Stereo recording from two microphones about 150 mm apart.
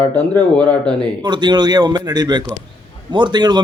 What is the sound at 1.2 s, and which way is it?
A man's voice, 30° right (ahead or behind).